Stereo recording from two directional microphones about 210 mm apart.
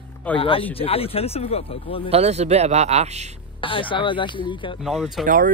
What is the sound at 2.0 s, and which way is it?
Speech, 30° right (ahead or behind).